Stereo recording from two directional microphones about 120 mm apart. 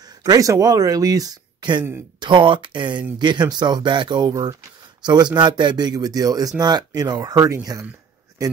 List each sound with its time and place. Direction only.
0.2 s speech: 30° right (ahead or behind)